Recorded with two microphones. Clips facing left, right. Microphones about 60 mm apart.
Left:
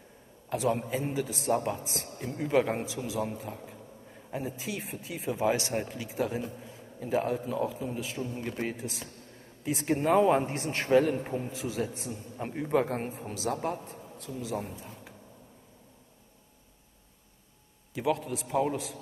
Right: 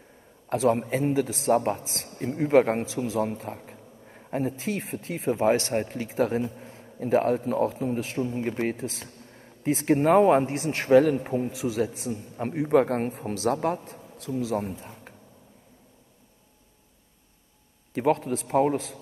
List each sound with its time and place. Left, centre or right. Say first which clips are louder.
0.5 s a man's voice: right 6 dB; right
3.3 s a sound: right 4 dB; right
4.4 s a man's voice: right 7 dB; right
6.6 s a man's voice: right 6 dB; right
17.9 s a man's voice: right 6 dB; right